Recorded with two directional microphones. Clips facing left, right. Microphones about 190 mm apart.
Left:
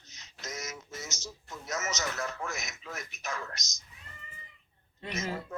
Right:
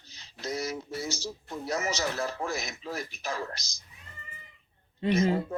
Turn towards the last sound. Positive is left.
turn(degrees=-30)  # may be behind; listen again after turning